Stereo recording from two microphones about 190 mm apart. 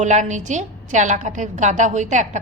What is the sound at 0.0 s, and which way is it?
A woman's voice, 40° right (ahead or behind).